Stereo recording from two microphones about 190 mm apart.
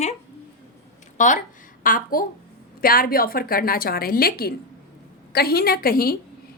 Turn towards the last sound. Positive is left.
turn(degrees=50)  # may be behind; listen again after turning